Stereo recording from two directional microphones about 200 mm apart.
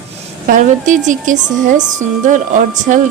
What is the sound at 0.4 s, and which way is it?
Speech, 40° right (ahead or behind).